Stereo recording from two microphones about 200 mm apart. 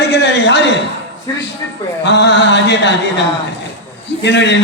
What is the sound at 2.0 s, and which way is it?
Speech, 60° left (ahead or behind).